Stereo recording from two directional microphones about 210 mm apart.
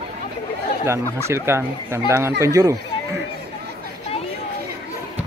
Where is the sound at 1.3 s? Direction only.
10° right (ahead or behind).